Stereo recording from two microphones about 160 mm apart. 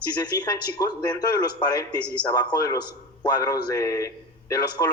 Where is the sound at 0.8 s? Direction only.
20° left (ahead or behind).